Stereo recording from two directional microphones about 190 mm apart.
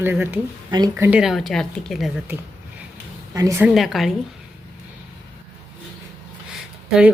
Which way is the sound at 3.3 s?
15° right (ahead or behind).